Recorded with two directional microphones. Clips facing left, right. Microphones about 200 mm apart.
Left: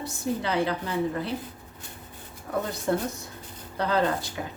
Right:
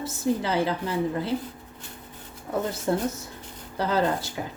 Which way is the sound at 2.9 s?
30° right (ahead or behind).